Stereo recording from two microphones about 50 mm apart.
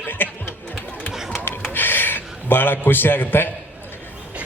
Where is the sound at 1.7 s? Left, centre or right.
Left.